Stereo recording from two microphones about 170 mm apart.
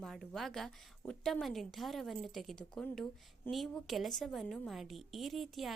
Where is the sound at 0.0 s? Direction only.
Centre (ahead or behind).